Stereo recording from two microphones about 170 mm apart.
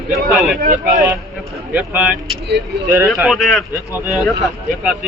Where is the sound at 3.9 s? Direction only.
15° right (ahead or behind).